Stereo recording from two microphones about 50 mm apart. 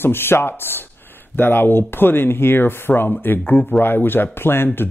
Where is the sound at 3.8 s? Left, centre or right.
Left.